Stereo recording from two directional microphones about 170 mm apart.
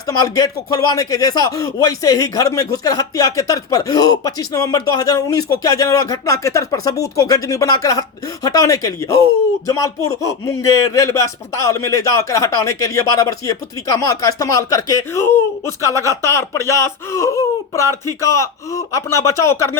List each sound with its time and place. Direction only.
0.1 s speech: 20° left (ahead or behind)